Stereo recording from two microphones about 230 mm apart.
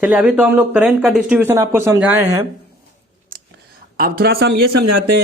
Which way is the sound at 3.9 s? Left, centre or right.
Right.